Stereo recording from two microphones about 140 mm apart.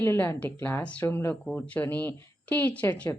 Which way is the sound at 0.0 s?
20° left (ahead or behind).